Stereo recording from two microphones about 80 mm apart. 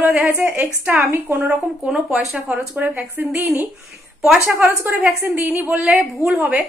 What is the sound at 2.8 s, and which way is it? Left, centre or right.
Speech, right.